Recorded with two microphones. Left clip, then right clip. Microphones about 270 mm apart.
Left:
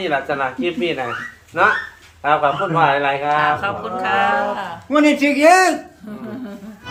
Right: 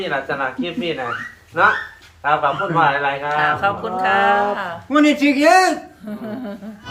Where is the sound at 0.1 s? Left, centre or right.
Left.